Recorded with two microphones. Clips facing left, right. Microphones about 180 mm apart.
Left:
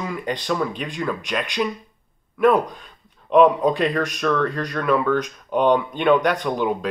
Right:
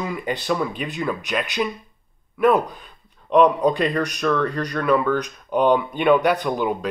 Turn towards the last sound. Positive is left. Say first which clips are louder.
# even
turn(degrees=-5)  # may be behind; listen again after turning